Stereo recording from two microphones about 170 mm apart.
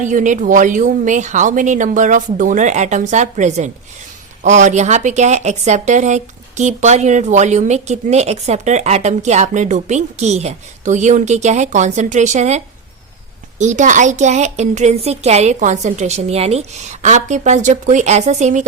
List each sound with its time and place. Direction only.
0.0 s speech: 50° right (ahead or behind)